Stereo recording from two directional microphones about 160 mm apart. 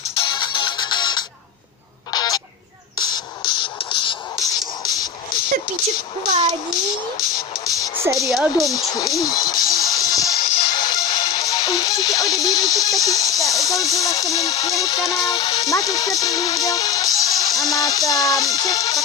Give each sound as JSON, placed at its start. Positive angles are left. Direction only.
{"t": 0.1, "sound": "music", "side_deg": 30}
{"t": 2.1, "sound": "a sound", "side_deg": 25}
{"t": 7.6, "sound": "speech", "side_deg": 20}
{"t": 8.3, "sound": "speech", "side_deg": 0}
{"t": 8.6, "sound": "speech", "side_deg": 25}
{"t": 10.3, "sound": "music", "side_deg": 50}
{"t": 10.8, "sound": "music", "side_deg": 25}
{"t": 12.2, "sound": "speech", "side_deg": 20}